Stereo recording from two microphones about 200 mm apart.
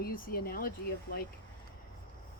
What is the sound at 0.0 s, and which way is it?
Speech, 50° left (ahead or behind).